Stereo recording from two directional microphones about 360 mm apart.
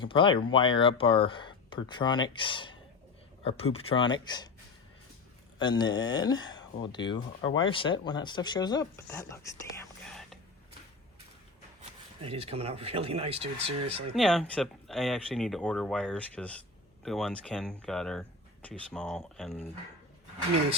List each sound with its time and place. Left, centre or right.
0.0 s speech: centre
5.5 s speech: centre
9.8 s whispering: centre
11.8 s speech: centre
14.2 s speech: centre